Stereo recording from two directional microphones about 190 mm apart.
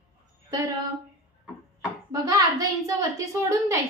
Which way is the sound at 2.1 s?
20° right (ahead or behind).